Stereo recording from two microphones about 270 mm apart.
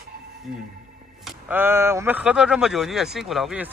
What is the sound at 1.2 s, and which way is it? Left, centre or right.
Speech, centre.